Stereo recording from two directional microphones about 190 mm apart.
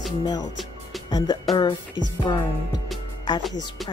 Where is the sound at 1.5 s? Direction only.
25° left (ahead or behind).